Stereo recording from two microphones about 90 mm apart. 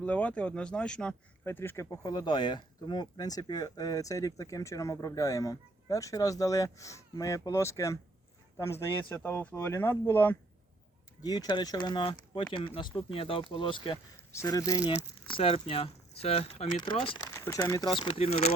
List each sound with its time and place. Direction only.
0.0 s speech: 15° left (ahead or behind)
1.5 s speech: 25° left (ahead or behind)
2.0 s speech: 55° left (ahead or behind); by 8.9 s 30° left (ahead or behind)
9.0 s speech: 20° left (ahead or behind)
11.2 s speech: 50° left (ahead or behind); by 12.9 s 65° left (ahead or behind)
13.0 s speech: 85° left
14.3 s speech: 35° left (ahead or behind)
15.3 s speech: 90° left; by 18.3 s 70° left (ahead or behind)